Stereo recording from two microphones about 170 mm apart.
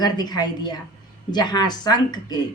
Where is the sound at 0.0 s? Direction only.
25° left (ahead or behind).